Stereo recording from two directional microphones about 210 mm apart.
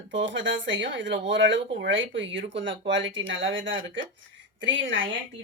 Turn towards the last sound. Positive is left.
turn(degrees=-60)  # may be behind; listen again after turning